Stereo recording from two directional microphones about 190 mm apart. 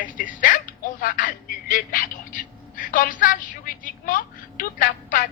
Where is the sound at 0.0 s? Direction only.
45° left (ahead or behind).